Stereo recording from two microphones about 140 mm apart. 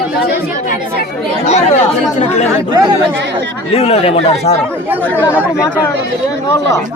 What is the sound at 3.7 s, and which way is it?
Speech, 45° left (ahead or behind).